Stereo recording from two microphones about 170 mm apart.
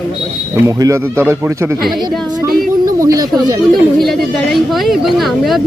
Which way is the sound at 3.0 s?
20° right (ahead or behind).